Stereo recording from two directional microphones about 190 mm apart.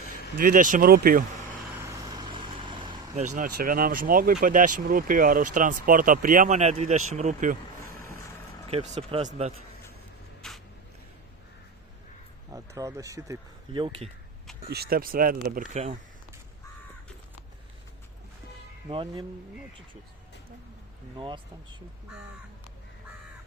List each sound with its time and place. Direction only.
0.3 s speech: 45° right (ahead or behind)
1.8 s vehicle: 20° right (ahead or behind)
3.3 s speech: 45° right (ahead or behind)
8.7 s speech: 30° right (ahead or behind)
10.4 s a sound: centre (ahead or behind)
12.5 s speech: 15° right (ahead or behind)
13.8 s speech: 25° right (ahead or behind)
14.7 s speech: 55° right (ahead or behind)
15.7 s speech: 35° right (ahead or behind)
18.9 s speech: 25° right (ahead or behind)
21.2 s speech: 25° right (ahead or behind)